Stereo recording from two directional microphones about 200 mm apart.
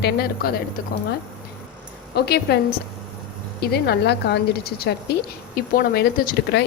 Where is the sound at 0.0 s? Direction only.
50° left (ahead or behind).